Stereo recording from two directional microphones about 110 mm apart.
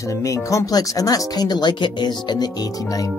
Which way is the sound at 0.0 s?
30° left (ahead or behind).